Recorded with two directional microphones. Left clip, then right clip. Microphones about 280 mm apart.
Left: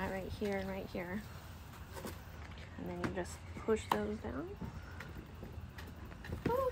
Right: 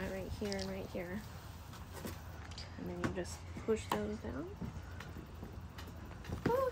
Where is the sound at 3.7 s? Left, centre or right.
Centre.